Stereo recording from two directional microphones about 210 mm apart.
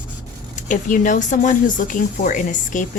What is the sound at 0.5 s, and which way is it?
A woman's voice, 35° left (ahead or behind).